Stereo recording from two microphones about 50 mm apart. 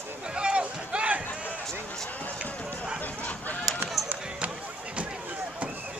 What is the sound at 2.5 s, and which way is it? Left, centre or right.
Run, left.